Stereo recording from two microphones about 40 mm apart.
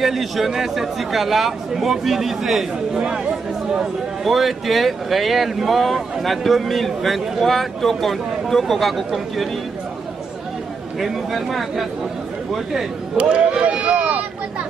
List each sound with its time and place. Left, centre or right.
0.0 s speech: centre
3.0 s speech: right
4.2 s speech: centre
11.0 s speech: centre
13.2 s speech: right